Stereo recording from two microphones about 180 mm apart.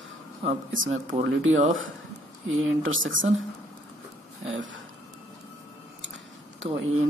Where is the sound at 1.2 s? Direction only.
90° right.